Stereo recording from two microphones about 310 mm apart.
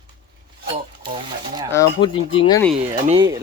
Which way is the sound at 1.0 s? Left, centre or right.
Centre.